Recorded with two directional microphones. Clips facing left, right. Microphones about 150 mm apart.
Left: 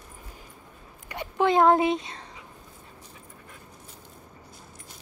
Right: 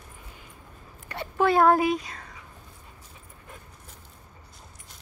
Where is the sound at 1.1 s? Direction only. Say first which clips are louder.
Even; 15° left (ahead or behind).